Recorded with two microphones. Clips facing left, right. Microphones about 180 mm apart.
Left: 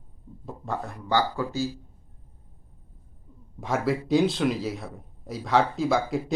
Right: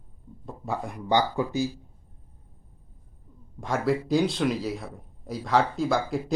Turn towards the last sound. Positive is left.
turn(degrees=0)  # may be behind; listen again after turning